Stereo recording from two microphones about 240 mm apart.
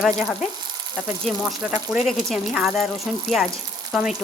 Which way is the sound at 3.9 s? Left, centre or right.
Centre.